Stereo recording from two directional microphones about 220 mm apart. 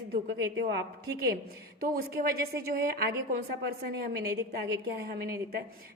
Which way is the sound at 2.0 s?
45° right (ahead or behind).